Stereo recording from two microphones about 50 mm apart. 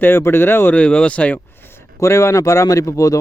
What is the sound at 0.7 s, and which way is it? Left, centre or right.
Speech, left.